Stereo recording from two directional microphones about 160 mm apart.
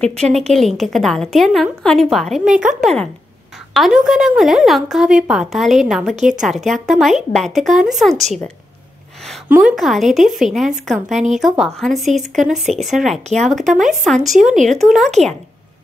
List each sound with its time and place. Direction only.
0.3 s a woman's voice: centre (ahead or behind)
9.6 s a woman's voice: centre (ahead or behind)
14.4 s speech: 50° right (ahead or behind)
14.8 s a woman's voice: centre (ahead or behind)